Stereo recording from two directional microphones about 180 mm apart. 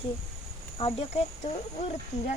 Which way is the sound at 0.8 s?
30° left (ahead or behind).